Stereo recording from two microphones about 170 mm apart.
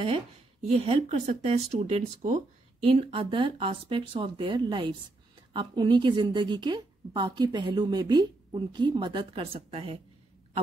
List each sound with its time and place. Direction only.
0.7 s a woman's voice: 40° right (ahead or behind)